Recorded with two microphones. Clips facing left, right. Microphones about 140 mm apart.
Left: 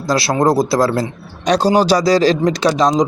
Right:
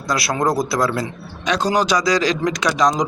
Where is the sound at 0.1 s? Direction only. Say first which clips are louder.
Left 5 dB; 30° left (ahead or behind).